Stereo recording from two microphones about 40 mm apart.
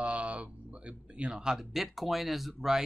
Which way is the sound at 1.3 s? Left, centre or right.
Centre.